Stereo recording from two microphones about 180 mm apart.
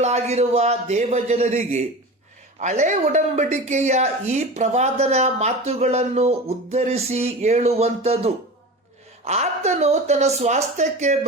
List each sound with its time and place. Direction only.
0.0 s a woman's voice: 35° right (ahead or behind)